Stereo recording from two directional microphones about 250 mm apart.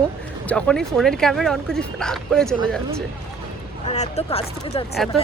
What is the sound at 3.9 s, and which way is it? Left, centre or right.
Speech, left.